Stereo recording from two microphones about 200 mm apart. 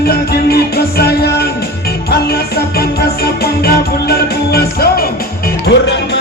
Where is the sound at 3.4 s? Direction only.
50° left (ahead or behind).